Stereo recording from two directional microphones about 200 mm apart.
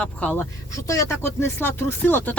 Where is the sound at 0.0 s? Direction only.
5° left (ahead or behind).